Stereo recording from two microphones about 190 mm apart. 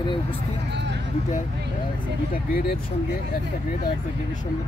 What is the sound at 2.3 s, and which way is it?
Speech, 50° left (ahead or behind).